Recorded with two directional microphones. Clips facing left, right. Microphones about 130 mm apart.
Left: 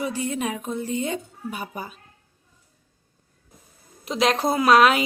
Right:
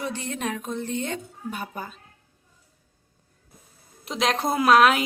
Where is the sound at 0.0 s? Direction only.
10° left (ahead or behind).